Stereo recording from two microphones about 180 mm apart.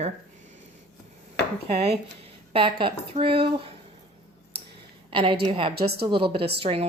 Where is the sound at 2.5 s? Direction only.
30° right (ahead or behind).